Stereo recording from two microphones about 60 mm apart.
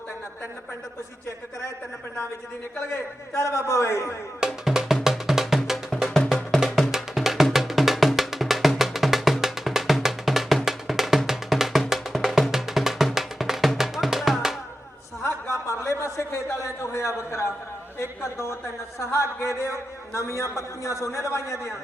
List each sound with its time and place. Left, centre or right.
3.3 s speech: left
4.4 s speech: centre
5.0 s music: centre
15.4 s a sound: left
18.0 s a man's voice: left